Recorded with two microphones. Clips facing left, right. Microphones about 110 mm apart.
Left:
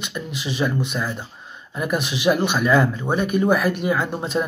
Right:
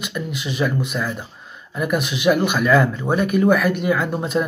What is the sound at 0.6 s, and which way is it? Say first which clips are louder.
Speech: right 1 dB; 15° left (ahead or behind).